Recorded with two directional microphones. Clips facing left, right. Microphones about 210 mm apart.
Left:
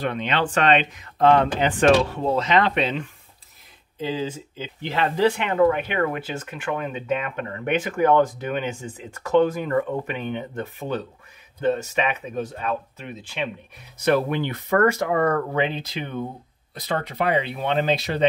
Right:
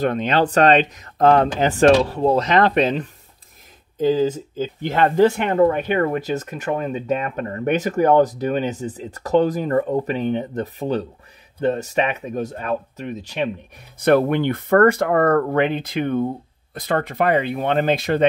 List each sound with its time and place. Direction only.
0.0 s speech: 40° right (ahead or behind)
13.9 s speech: 55° right (ahead or behind)